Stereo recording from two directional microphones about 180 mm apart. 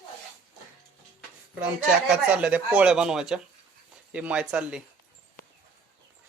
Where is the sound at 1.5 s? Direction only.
5° right (ahead or behind).